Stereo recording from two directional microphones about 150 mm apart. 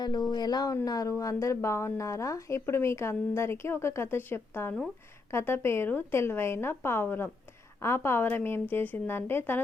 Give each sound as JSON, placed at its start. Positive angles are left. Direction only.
{"t": 0.0, "sound": "speech", "side_deg": 25}